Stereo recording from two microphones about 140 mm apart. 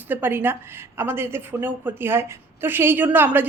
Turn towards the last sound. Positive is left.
turn(degrees=-15)  # may be behind; listen again after turning